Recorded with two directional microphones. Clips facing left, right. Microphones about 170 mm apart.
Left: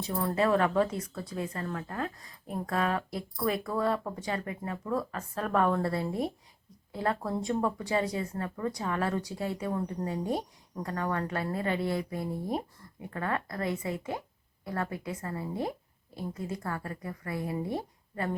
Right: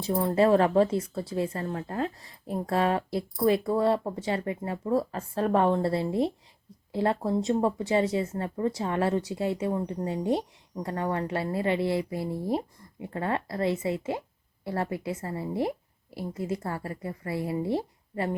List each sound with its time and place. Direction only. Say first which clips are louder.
0.0 s speech: right 5 dB; 30° right (ahead or behind)